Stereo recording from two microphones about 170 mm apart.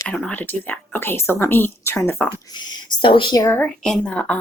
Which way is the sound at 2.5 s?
25° left (ahead or behind).